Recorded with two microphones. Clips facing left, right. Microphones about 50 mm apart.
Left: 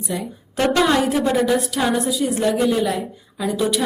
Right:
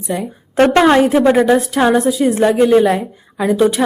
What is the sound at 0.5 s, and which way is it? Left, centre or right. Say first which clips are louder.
Speech: right 7 dB; right.